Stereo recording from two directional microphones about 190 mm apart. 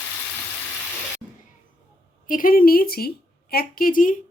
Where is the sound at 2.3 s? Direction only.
45° left (ahead or behind).